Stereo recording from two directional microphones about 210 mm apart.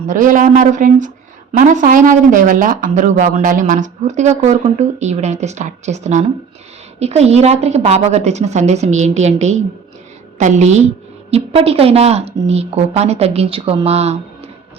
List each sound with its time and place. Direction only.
0.1 s a woman's voice: 40° right (ahead or behind)